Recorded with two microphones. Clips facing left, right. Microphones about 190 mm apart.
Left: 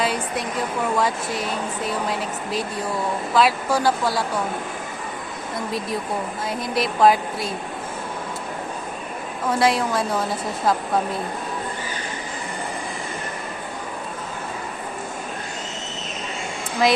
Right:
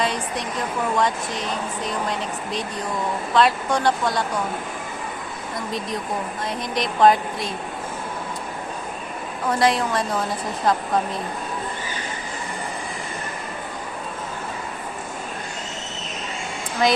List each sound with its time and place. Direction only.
0.0 s a sound: 5° left (ahead or behind)
0.9 s speech: 5° left (ahead or behind)
6.7 s speech: 5° left (ahead or behind)
9.5 s speech: centre (ahead or behind)
16.8 s speech: centre (ahead or behind)